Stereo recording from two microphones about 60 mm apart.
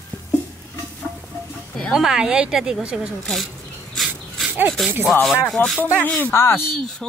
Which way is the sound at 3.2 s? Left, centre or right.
Centre.